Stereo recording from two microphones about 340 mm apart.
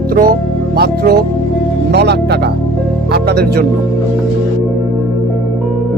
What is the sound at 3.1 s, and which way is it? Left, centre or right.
Music, right.